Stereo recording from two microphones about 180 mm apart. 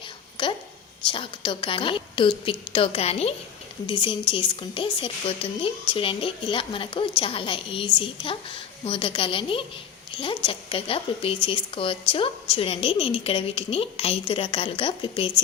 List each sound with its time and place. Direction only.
1.0 s a woman's voice: 30° left (ahead or behind)